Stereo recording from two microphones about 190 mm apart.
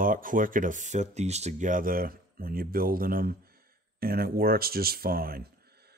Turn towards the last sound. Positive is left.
turn(degrees=-50)  # may be behind; listen again after turning